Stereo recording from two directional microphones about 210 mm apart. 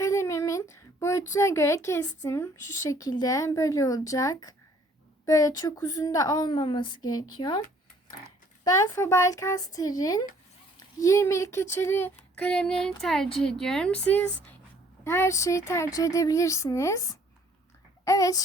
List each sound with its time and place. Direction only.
0.0 s a woman's voice: 15° left (ahead or behind)
8.6 s a child's voice: 15° left (ahead or behind)